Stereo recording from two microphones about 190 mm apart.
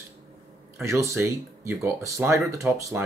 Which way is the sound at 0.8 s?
15° right (ahead or behind).